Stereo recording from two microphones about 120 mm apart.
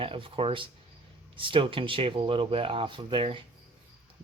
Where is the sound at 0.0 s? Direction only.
50° right (ahead or behind).